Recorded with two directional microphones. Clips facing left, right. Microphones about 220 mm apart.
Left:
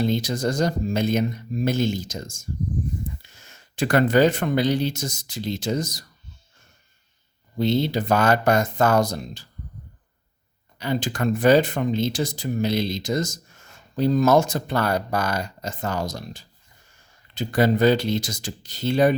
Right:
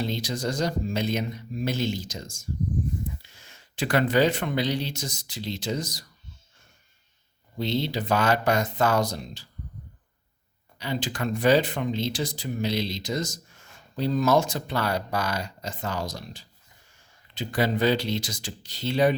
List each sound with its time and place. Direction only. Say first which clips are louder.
0.0 s speech: left 6 dB; 50° left (ahead or behind)
7.6 s speech: left 6 dB; 50° left (ahead or behind)
10.8 s speech: left 5 dB; 45° left (ahead or behind)